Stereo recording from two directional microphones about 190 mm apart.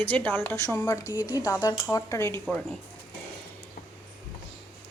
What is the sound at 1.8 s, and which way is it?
Speech, 15° left (ahead or behind).